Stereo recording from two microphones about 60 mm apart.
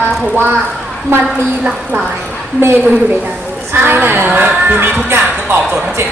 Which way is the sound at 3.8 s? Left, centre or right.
Right.